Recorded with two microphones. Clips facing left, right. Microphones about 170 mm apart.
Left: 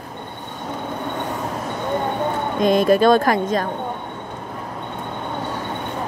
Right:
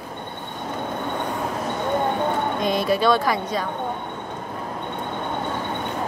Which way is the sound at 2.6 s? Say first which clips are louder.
Left 8 dB; 50° left (ahead or behind).